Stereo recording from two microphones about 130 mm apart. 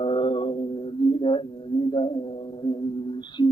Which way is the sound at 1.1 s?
40° left (ahead or behind).